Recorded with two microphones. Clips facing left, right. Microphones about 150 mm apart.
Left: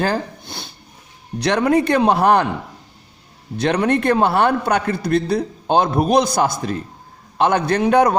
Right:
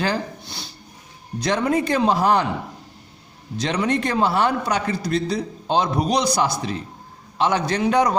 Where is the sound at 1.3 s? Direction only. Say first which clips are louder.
Left 4 dB; 65° left (ahead or behind).